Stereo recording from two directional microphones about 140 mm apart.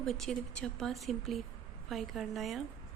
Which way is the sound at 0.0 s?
5° left (ahead or behind).